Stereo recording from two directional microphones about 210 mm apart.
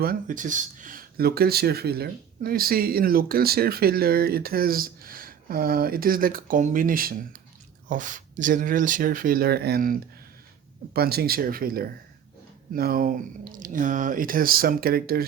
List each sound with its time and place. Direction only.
0.0 s speech: 40° right (ahead or behind)